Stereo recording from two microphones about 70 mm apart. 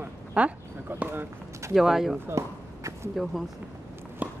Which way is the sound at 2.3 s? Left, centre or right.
Right.